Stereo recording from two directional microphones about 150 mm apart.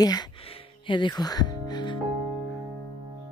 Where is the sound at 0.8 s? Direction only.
30° left (ahead or behind).